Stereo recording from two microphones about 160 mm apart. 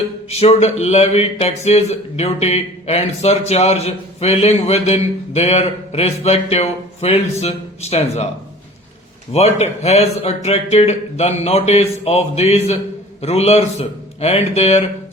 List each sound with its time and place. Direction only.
0.3 s speech: 40° left (ahead or behind)
9.3 s speech: 40° left (ahead or behind)